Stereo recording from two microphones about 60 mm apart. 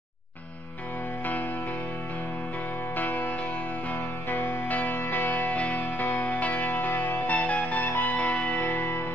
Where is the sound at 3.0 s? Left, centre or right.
Left.